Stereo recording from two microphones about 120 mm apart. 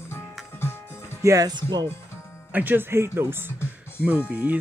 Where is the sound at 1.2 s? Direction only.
30° right (ahead or behind).